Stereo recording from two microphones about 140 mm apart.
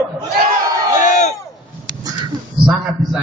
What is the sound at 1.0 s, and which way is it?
Crowd, 55° left (ahead or behind).